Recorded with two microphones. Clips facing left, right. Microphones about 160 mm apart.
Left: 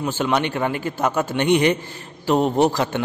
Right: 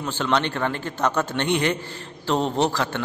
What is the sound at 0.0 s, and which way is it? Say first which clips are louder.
A man's voice: left 2 dB; 10° left (ahead or behind).